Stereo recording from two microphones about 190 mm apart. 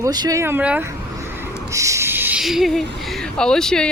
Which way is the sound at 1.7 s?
15° right (ahead or behind).